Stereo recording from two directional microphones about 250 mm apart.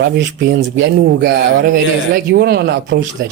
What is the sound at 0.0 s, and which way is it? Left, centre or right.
Speech, right.